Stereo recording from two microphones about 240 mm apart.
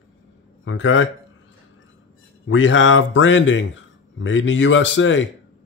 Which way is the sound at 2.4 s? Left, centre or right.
Left.